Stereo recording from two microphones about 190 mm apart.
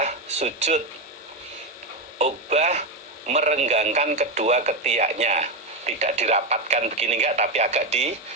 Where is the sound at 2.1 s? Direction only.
35° right (ahead or behind).